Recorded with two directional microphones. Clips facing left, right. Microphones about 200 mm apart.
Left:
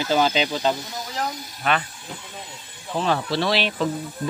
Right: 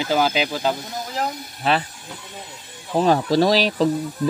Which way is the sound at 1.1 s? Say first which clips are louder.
Right 2 dB; 30° right (ahead or behind).